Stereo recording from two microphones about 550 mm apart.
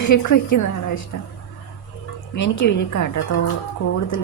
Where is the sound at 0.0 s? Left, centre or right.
Left.